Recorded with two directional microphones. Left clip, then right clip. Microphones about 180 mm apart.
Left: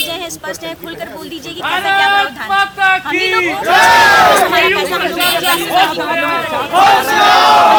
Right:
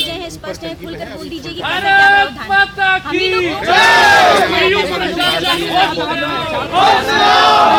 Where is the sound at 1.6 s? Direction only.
55° left (ahead or behind).